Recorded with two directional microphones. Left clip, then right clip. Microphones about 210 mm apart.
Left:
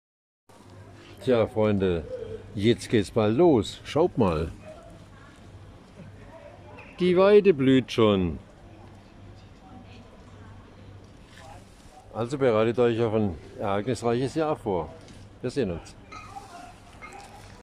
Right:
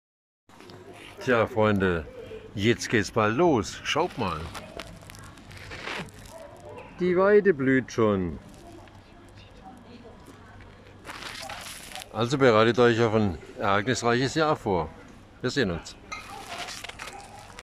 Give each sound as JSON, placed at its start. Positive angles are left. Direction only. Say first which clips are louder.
{"t": 1.2, "sound": "a man's voice", "louder": "even", "side_deg": 15}
{"t": 7.0, "sound": "speech", "louder": "left 2 dB", "side_deg": 5}
{"t": 12.1, "sound": "a man's voice", "louder": "right 3 dB", "side_deg": 5}